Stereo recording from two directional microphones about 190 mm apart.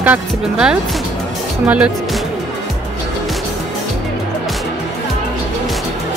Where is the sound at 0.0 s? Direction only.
5° right (ahead or behind).